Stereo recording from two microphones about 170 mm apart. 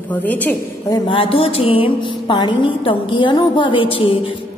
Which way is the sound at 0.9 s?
30° left (ahead or behind).